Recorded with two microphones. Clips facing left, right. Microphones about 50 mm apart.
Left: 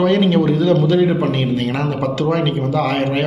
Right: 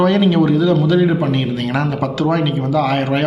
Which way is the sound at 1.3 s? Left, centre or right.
Left.